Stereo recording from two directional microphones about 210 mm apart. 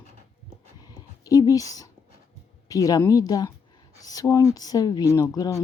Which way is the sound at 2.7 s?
15° left (ahead or behind).